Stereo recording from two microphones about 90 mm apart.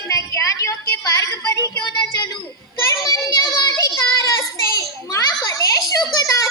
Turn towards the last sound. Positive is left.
turn(degrees=45)  # may be behind; listen again after turning